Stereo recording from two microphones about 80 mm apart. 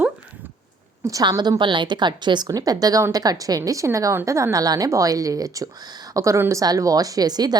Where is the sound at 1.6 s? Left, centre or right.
Right.